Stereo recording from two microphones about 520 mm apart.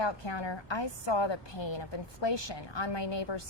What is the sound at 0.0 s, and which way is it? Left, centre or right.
A woman's voice, left.